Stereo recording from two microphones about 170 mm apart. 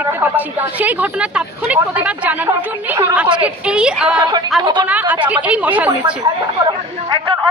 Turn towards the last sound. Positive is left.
turn(degrees=-10)  # may be behind; listen again after turning